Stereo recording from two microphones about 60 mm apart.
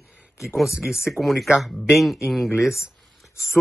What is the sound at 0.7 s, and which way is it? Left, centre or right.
Speech, centre.